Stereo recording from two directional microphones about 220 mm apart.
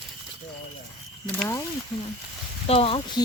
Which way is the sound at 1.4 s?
10° left (ahead or behind).